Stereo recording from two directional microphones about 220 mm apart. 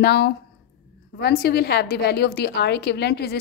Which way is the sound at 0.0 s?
50° left (ahead or behind).